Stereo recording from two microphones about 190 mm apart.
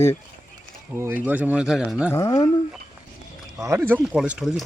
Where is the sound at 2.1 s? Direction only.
15° left (ahead or behind).